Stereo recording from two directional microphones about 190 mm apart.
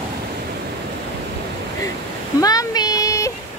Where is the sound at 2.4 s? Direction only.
20° left (ahead or behind).